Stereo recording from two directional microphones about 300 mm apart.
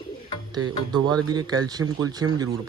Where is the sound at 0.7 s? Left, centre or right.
Centre.